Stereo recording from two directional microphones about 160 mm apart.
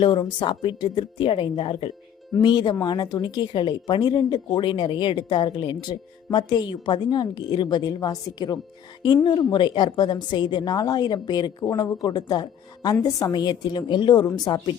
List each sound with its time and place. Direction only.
0.0 s a woman's voice: 30° left (ahead or behind)